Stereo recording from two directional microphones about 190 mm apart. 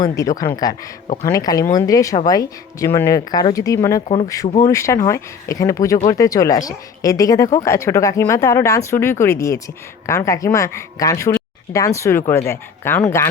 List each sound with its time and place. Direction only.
0.0 s speech: 20° left (ahead or behind)